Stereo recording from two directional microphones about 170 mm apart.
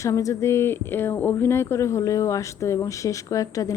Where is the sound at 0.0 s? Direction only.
20° left (ahead or behind).